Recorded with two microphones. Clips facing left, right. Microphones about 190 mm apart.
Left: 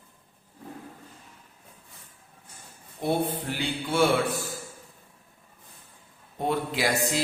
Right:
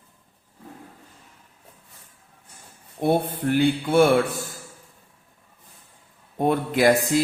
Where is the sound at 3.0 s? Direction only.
55° right (ahead or behind).